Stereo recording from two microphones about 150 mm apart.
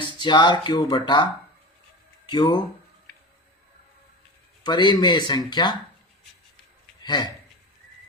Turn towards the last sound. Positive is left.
turn(degrees=30)  # may be behind; listen again after turning